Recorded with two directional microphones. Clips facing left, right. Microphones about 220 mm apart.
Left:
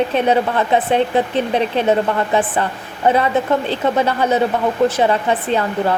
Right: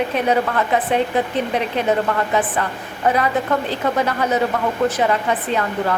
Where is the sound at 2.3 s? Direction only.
30° left (ahead or behind).